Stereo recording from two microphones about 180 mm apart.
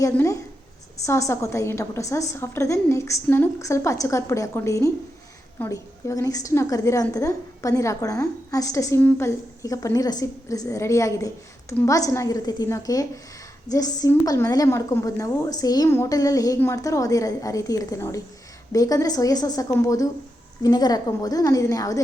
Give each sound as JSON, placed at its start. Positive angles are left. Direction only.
{"t": 0.0, "sound": "a woman's voice", "side_deg": 15}